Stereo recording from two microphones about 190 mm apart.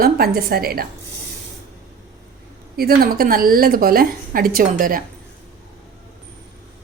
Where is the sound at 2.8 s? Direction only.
55° right (ahead or behind).